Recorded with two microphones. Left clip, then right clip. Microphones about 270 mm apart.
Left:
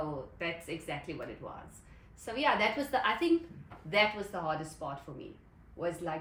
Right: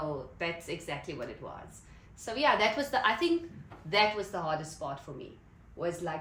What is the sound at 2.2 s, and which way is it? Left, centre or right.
Speech, centre.